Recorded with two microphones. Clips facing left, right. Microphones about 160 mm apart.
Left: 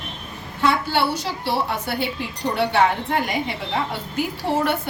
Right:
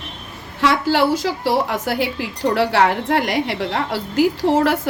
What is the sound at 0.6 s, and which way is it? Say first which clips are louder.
A woman's voice: right 4 dB; 90° right.